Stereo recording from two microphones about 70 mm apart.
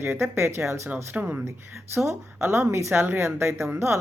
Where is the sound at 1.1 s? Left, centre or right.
Right.